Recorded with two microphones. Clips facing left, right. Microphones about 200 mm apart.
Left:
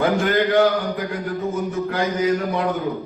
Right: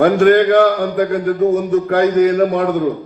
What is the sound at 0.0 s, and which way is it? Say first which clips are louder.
A man's voice: right 9 dB; 60° right (ahead or behind).